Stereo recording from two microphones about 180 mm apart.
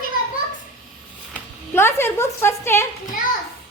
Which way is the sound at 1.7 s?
15° left (ahead or behind).